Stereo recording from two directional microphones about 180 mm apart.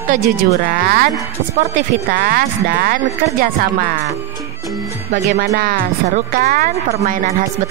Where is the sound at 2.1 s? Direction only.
55° right (ahead or behind).